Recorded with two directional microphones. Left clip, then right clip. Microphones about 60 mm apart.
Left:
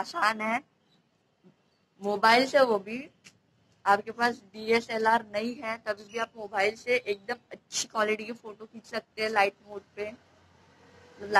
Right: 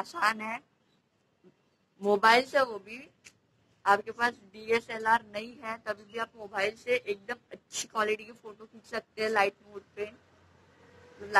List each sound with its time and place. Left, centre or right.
0.0 s a woman's voice: centre
2.0 s a woman's voice: centre
4.4 s a woman's voice: centre
5.0 s a woman's voice: centre
7.3 s a sound: centre
7.9 s a woman's voice: centre
10.2 s a sound: centre
10.6 s vehicle: centre